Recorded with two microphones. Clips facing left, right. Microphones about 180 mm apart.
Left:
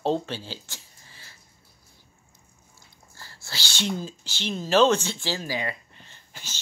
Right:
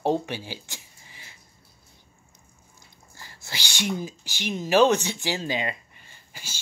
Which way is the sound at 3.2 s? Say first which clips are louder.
Right 1 dB; 15° right (ahead or behind).